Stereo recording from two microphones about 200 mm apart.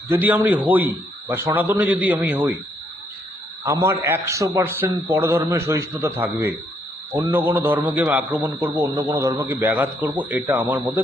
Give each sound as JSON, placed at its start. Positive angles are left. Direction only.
{"t": 0.1, "sound": "a man's voice", "side_deg": -10}
{"t": 3.6, "sound": "a man's voice", "side_deg": -15}